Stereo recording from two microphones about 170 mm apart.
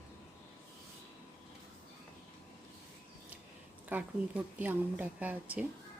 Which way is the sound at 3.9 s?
10° right (ahead or behind).